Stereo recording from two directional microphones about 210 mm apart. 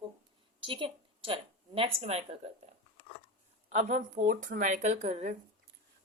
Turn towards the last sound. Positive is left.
turn(degrees=-30)  # may be behind; listen again after turning